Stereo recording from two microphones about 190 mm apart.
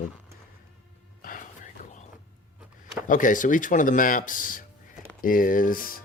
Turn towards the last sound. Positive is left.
turn(degrees=50)  # may be behind; listen again after turning